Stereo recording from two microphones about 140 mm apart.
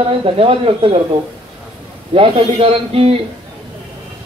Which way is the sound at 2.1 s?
40° right (ahead or behind).